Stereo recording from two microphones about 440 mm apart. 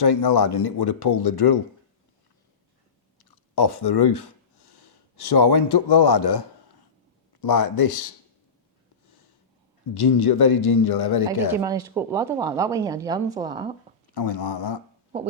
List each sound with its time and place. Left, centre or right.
0.0 s speech: left
3.5 s speech: left
7.4 s speech: left
9.9 s speech: left
11.5 s a woman's voice: centre
14.1 s speech: left